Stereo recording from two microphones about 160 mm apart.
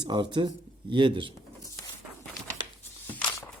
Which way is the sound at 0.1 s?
30° right (ahead or behind).